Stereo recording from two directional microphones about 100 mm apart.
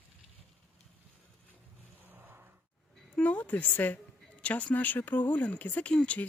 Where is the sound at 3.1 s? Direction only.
15° left (ahead or behind).